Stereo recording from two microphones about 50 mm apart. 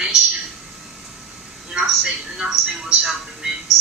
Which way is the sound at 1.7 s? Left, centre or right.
Centre.